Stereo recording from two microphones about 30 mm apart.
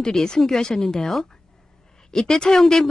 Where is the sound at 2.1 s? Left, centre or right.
Left.